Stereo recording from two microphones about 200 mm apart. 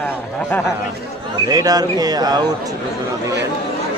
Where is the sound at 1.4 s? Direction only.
20° right (ahead or behind).